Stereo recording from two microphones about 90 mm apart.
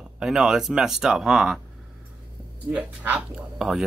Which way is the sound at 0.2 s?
5° right (ahead or behind).